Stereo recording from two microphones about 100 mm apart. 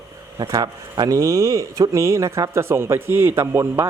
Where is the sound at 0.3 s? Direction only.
40° right (ahead or behind).